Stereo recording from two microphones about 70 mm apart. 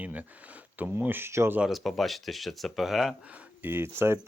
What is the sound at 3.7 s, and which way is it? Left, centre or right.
Speech, right.